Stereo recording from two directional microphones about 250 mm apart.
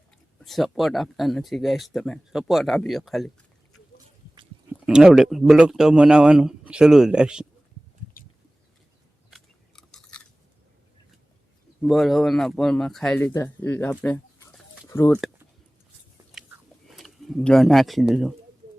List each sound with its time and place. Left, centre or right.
0.4 s speech: centre
4.9 s speech: centre
9.3 s biting: centre
11.8 s speech: centre
16.4 s biting: centre
16.9 s speech: centre